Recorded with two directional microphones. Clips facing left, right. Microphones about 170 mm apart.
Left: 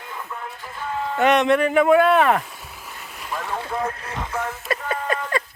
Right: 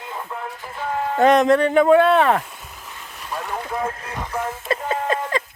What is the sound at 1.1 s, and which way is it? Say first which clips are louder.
Speech: right 3 dB; 35° right (ahead or behind).